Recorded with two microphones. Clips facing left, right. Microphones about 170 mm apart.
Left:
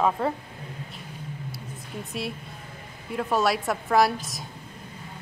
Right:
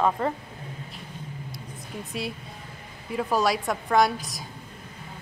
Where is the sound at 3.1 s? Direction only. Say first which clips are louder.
Even; centre (ahead or behind).